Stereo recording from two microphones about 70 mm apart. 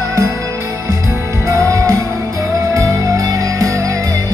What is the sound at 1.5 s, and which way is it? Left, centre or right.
Music, right.